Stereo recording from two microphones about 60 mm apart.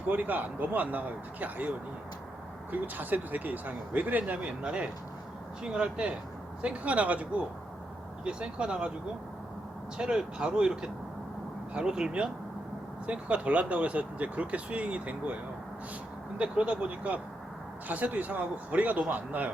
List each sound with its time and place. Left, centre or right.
0.1 s speech: right
2.7 s speech: right
10.0 s speech: centre
16.4 s speech: centre